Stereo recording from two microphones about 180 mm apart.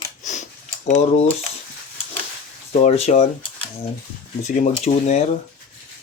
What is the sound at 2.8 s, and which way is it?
Speech, 35° left (ahead or behind).